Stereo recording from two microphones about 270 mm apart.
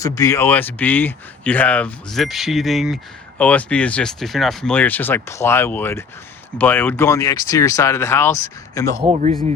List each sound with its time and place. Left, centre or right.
0.0 s speech: centre
9.0 s speech: right